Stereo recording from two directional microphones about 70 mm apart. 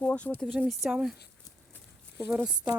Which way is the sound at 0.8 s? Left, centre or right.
Centre.